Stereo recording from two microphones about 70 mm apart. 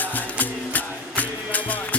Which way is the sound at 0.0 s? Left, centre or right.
Left.